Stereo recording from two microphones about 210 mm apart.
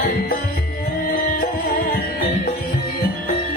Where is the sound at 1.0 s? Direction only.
45° left (ahead or behind).